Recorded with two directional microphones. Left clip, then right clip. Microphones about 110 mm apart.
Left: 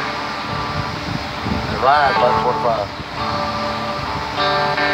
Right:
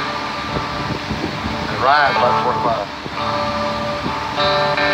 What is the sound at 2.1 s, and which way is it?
Speech, 20° right (ahead or behind).